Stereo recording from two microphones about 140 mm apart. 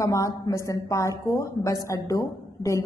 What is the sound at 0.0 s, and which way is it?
A woman's voice, 25° left (ahead or behind).